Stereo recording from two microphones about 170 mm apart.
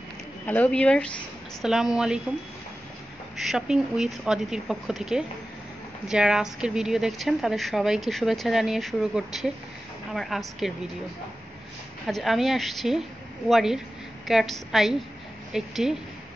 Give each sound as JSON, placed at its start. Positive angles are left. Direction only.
{"t": 0.5, "sound": "a woman's voice", "side_deg": 10}
{"t": 3.3, "sound": "a woman's voice", "side_deg": -5}
{"t": 12.1, "sound": "a woman's voice", "side_deg": 0}